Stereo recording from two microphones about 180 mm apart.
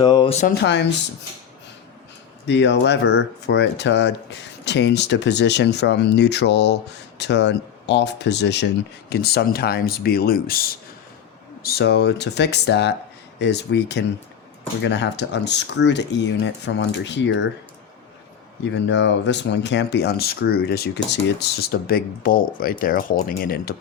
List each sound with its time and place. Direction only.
0.0 s a sound: 25° left (ahead or behind)
0.6 s speech: 75° left (ahead or behind)
2.5 s speech: 75° left (ahead or behind)
18.6 s speech: 80° left; by 23.7 s 55° left (ahead or behind)